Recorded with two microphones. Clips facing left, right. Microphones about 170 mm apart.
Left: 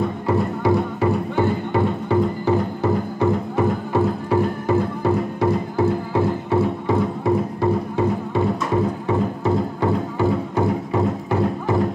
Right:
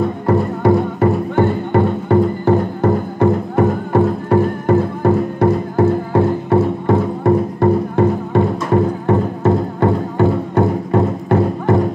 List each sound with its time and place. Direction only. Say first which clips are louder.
0.3 s music: right 5 dB; 55° right (ahead or behind)